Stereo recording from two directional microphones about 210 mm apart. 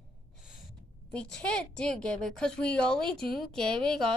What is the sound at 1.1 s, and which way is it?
A woman's voice, 5° left (ahead or behind).